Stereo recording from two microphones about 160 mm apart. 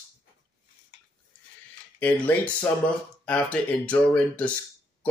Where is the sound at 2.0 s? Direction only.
10° left (ahead or behind).